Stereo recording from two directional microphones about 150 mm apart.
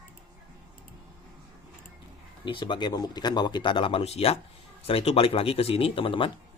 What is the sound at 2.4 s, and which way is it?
Speech, 35° left (ahead or behind).